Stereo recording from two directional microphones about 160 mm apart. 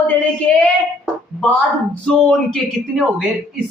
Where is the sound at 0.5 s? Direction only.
5° left (ahead or behind).